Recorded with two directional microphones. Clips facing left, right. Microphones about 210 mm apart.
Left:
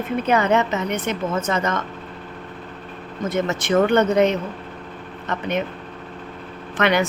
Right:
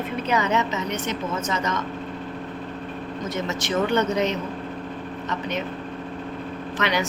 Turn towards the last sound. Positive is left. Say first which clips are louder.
# left 5 dB
turn(degrees=55)  # may be behind; listen again after turning